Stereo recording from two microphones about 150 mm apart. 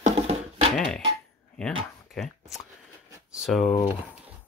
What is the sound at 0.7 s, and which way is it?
Speech, 5° left (ahead or behind).